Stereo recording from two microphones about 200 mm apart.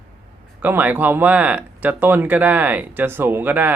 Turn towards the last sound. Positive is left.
turn(degrees=-10)  # may be behind; listen again after turning